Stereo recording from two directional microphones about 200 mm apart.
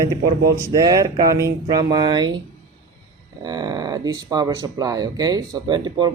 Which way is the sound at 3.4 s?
20° right (ahead or behind).